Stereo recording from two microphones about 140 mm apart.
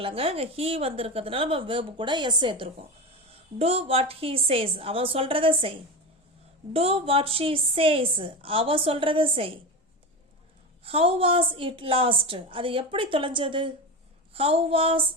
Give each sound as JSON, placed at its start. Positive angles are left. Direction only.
{"t": 0.0, "sound": "a woman's voice", "side_deg": -40}
{"t": 3.6, "sound": "a woman's voice", "side_deg": -45}
{"t": 10.8, "sound": "a woman's voice", "side_deg": -40}
{"t": 14.3, "sound": "a sound", "side_deg": -45}